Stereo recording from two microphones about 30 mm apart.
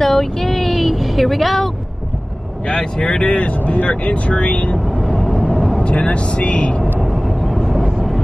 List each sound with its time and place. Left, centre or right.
0.0 s a sound: centre
3.0 s speech: left
5.4 s vehicle: left
5.9 s speech: left
7.1 s vehicle: centre